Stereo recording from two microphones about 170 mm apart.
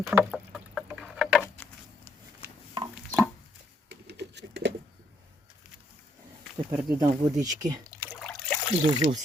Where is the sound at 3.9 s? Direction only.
75° right (ahead or behind).